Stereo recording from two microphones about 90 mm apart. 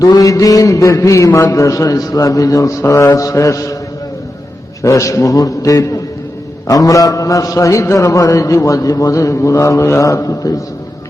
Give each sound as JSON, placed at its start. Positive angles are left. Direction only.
{"t": 0.1, "sound": "a man's voice", "side_deg": 40}
{"t": 4.8, "sound": "a man's voice", "side_deg": 35}